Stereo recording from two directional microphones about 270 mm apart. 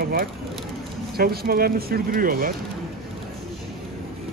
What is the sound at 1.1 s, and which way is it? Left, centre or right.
Speech, right.